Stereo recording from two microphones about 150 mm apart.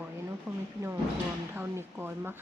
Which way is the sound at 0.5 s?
20° right (ahead or behind).